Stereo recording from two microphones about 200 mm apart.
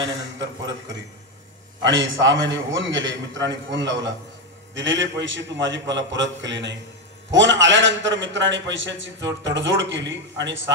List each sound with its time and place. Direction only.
1.9 s a man's voice: 70° right (ahead or behind)